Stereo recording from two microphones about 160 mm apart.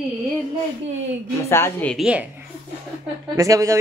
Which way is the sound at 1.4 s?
15° left (ahead or behind).